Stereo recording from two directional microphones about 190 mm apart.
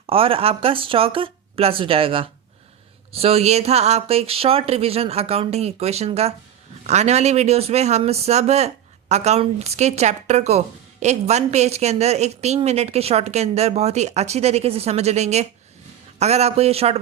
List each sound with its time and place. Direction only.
0.1 s a woman's voice: 30° right (ahead or behind)